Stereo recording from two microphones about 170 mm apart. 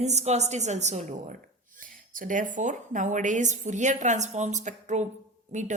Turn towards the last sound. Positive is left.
turn(degrees=-45)  # may be behind; listen again after turning